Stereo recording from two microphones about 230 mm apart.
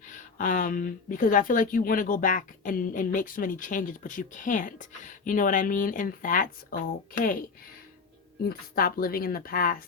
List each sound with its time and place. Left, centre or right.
0.1 s speech: left
8.4 s speech: left